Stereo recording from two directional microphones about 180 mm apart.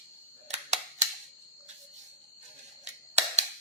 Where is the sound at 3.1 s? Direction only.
40° right (ahead or behind).